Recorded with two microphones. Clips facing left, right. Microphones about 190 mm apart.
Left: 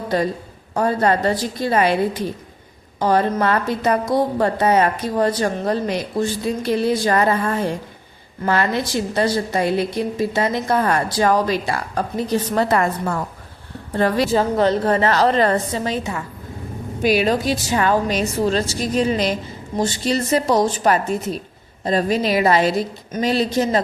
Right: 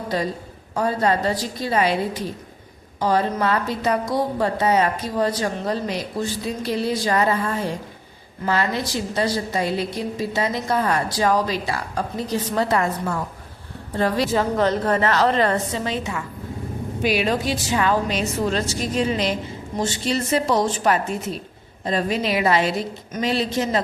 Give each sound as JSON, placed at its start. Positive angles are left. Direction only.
{"t": 0.7, "sound": "speech", "side_deg": 50}
{"t": 3.0, "sound": "a woman's voice", "side_deg": 55}
{"t": 14.3, "sound": "a woman's voice", "side_deg": 30}